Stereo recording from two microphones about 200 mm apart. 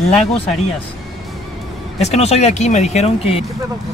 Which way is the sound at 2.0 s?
30° left (ahead or behind).